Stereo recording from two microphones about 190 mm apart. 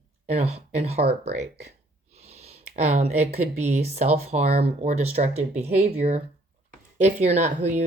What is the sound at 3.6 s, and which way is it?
Speech, 35° right (ahead or behind).